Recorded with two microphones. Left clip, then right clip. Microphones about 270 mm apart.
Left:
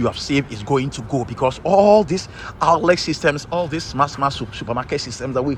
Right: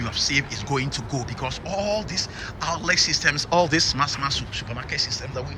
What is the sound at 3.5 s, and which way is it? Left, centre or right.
Speech, centre.